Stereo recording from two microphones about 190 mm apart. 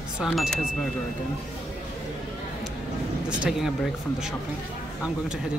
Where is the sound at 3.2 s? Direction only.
5° right (ahead or behind).